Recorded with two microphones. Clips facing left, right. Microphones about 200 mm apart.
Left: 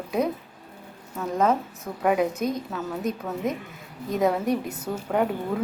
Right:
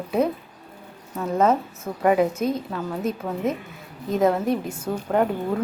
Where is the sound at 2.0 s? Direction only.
Centre (ahead or behind).